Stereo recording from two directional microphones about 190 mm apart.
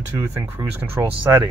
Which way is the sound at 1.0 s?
15° right (ahead or behind).